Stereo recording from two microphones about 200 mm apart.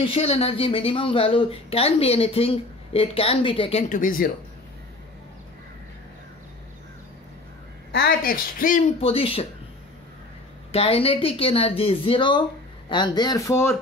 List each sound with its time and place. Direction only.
0.0 s a woman's voice: 30° left (ahead or behind)
3.9 s speech: 45° left (ahead or behind)
7.9 s speech: 50° left (ahead or behind)
9.0 s a woman's voice: 30° left (ahead or behind)
10.7 s a woman's voice: 30° left (ahead or behind); by 13.7 s 15° left (ahead or behind)